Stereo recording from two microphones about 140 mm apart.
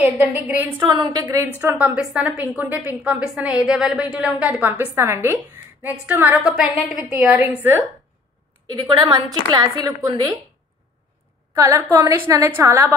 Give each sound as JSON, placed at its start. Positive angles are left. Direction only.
{"t": 0.0, "sound": "a woman's voice", "side_deg": -15}
{"t": 8.6, "sound": "a woman's voice", "side_deg": -30}
{"t": 11.5, "sound": "a woman's voice", "side_deg": -20}